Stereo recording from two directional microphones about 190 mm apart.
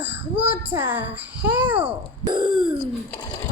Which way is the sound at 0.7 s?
10° right (ahead or behind).